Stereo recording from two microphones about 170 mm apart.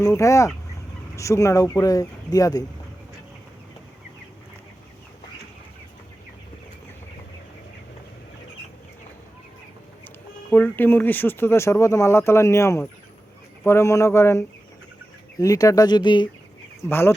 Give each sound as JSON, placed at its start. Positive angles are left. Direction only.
{"t": 0.0, "sound": "speech", "side_deg": 15}
{"t": 10.5, "sound": "speech", "side_deg": 10}
{"t": 16.9, "sound": "speech", "side_deg": 15}